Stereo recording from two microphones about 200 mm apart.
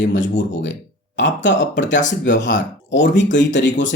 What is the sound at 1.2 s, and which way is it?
Speech, 65° left (ahead or behind).